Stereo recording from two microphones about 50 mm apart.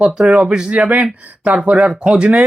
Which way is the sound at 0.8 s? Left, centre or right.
Right.